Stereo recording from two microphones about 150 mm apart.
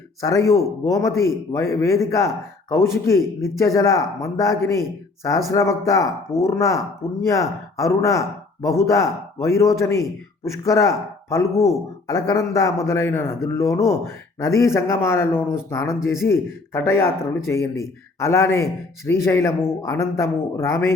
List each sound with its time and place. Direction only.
0.2 s a man's voice: 20° left (ahead or behind)